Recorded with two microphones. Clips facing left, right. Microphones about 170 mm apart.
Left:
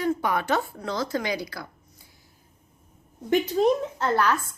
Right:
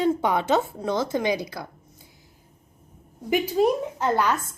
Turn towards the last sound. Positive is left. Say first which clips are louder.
# right 1 dB
turn(degrees=-15)  # may be behind; listen again after turning